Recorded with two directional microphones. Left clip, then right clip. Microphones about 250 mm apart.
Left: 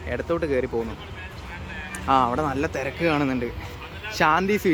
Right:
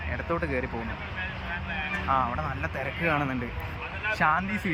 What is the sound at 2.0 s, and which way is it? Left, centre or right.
Speech, left.